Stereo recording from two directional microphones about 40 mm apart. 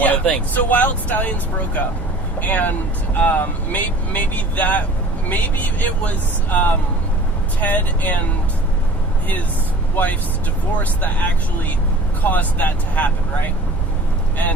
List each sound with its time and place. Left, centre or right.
0.5 s speech: left
9.9 s speech: left